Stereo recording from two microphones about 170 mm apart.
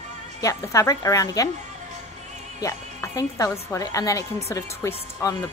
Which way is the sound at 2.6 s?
20° left (ahead or behind).